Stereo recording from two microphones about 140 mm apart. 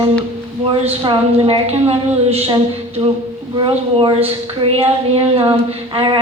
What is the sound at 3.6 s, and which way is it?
A woman's voice, 40° right (ahead or behind).